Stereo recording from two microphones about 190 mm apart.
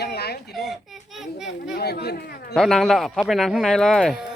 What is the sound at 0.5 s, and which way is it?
Speech, centre (ahead or behind).